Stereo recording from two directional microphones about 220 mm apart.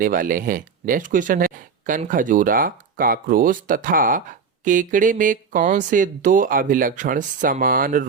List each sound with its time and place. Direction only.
0.0 s speech: 40° right (ahead or behind)